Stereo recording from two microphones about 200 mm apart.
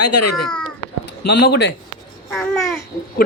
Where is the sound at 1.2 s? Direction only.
55° left (ahead or behind).